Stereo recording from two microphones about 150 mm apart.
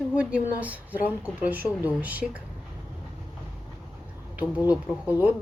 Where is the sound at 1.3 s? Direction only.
10° right (ahead or behind).